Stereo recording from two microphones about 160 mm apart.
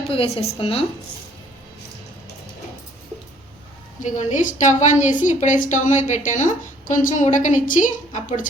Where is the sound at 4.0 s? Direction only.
50° left (ahead or behind).